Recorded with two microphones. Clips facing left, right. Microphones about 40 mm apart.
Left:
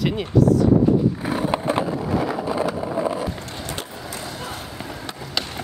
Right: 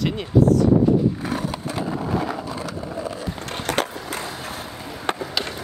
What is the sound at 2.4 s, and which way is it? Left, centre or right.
Vehicle, centre.